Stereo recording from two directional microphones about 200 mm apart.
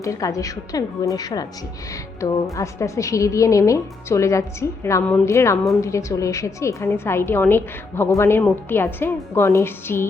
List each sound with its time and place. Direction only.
0.0 s a woman's voice: 15° left (ahead or behind)